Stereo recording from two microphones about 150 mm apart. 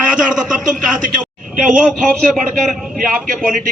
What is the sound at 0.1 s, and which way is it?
A man's voice, 5° right (ahead or behind).